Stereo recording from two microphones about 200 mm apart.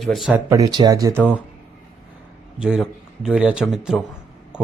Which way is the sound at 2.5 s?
5° right (ahead or behind).